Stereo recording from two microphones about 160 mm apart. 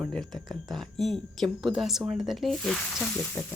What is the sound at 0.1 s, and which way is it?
Speech, centre (ahead or behind).